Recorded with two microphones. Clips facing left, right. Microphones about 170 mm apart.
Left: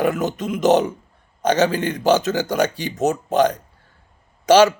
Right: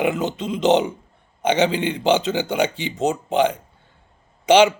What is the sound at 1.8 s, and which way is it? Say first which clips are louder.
A man's voice: left 1 dB; 15° right (ahead or behind).